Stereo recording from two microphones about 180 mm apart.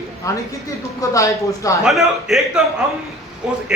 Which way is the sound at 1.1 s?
20° left (ahead or behind).